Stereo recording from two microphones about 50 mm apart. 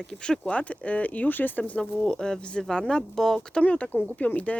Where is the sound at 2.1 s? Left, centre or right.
Centre.